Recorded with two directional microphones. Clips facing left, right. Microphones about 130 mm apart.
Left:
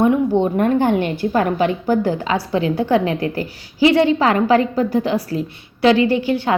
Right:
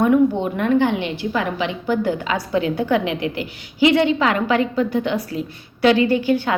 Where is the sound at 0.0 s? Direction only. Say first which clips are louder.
Left 1 dB; 30° left (ahead or behind).